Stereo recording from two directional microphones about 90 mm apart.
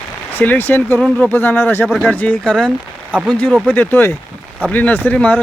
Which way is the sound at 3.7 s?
20° left (ahead or behind).